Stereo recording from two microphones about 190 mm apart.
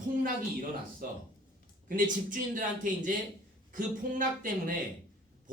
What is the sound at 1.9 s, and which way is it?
Speech, 45° right (ahead or behind).